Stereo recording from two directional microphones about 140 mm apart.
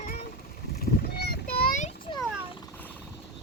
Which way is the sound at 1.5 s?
90° left.